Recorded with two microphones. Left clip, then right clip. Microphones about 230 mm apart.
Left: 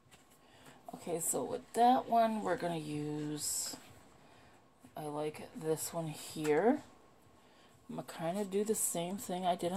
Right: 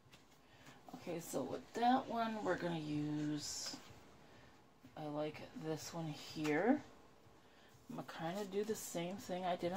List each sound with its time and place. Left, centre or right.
0.9 s speech: left
4.9 s speech: left
7.9 s speech: left